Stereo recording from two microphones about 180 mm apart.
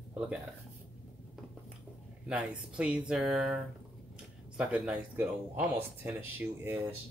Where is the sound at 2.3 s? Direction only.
5° right (ahead or behind).